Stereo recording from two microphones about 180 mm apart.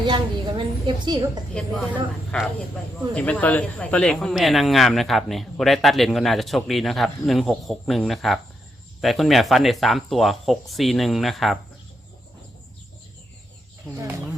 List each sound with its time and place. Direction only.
0.0 s a woman's voice: 25° right (ahead or behind)
2.3 s speech: 5° left (ahead or behind)
13.9 s speech: 15° right (ahead or behind)